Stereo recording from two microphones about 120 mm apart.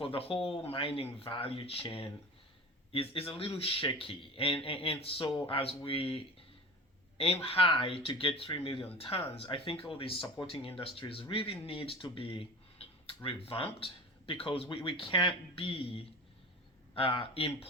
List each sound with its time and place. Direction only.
0.0 s speech: 50° left (ahead or behind)
7.4 s speech: 50° left (ahead or behind)